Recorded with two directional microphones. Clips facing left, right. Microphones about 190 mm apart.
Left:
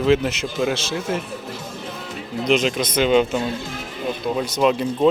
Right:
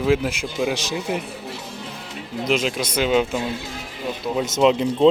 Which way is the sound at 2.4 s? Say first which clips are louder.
Left 3 dB; 5° right (ahead or behind).